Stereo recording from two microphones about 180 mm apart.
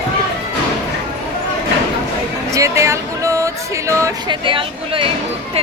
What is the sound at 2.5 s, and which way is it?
Music, 15° right (ahead or behind).